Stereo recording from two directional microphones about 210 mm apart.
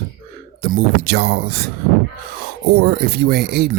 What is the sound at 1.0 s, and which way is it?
Speech, 50° right (ahead or behind).